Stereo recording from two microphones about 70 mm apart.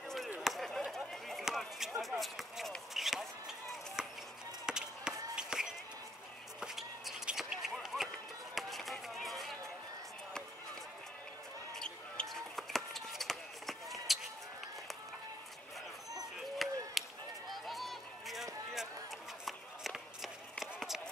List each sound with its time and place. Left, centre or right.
0.4 s chop: centre
2.9 s basketball bounce: centre
4.6 s chop: centre
6.6 s a sound: centre
8.5 s chop: centre
11.7 s basketball bounce: centre
16.3 s a sound: centre